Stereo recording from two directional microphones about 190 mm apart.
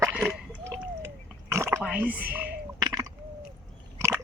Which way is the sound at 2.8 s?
20° right (ahead or behind).